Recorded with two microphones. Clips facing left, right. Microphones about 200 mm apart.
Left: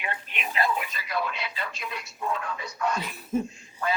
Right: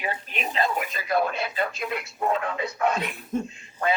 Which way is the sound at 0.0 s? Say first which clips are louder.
Right 4 dB; 40° right (ahead or behind).